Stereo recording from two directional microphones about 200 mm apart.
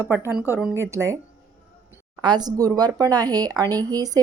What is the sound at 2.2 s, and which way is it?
Speech, 20° right (ahead or behind).